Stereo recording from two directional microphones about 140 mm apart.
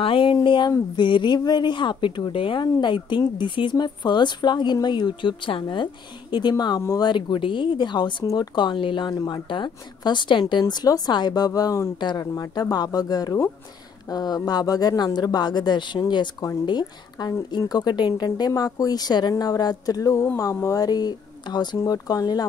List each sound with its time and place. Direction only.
0.0 s speech: 40° left (ahead or behind)
6.8 s speech: 20° left (ahead or behind)
7.1 s speech: 35° left (ahead or behind)